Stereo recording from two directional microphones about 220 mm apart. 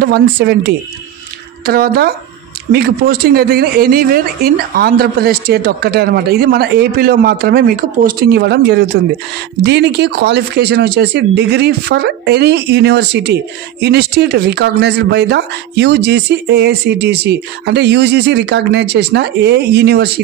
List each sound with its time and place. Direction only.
0.0 s speech: 45° right (ahead or behind)